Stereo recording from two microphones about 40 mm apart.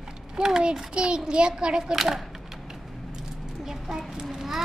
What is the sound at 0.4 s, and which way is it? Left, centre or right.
A child's voice, centre.